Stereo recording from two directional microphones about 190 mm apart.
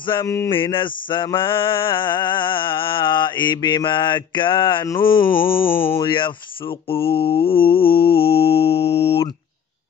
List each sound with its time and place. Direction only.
0.0 s mantra: 20° left (ahead or behind)
5.2 s a sound: 10° left (ahead or behind)
5.9 s mantra: 25° left (ahead or behind)